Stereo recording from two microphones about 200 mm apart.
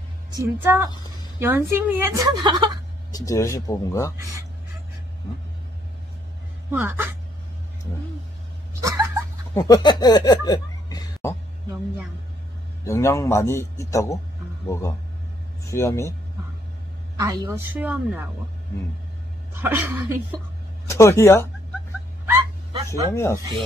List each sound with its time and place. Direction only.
0.3 s a woman's voice: 15° right (ahead or behind)
3.1 s a man's voice: 15° left (ahead or behind)
6.7 s a woman's voice: 10° right (ahead or behind)
8.8 s a sound: 15° right (ahead or behind)
9.5 s speech: 20° left (ahead or behind)
12.8 s a man's voice: 15° left (ahead or behind)
15.7 s a man's voice: 15° left (ahead or behind)
17.2 s a woman's voice: 15° right (ahead or behind)
19.5 s a woman's voice: 10° right (ahead or behind)
20.9 s a man's voice: 15° left (ahead or behind)
22.2 s a sound: 10° right (ahead or behind)
23.1 s a man's voice: 15° left (ahead or behind)